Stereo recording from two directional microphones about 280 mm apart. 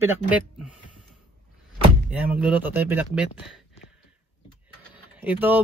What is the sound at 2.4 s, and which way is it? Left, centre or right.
Speech, centre.